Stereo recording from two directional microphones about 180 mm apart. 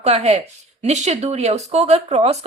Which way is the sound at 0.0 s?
40° right (ahead or behind).